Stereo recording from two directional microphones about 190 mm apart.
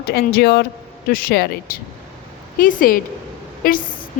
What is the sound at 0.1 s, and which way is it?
A woman's voice, 55° left (ahead or behind).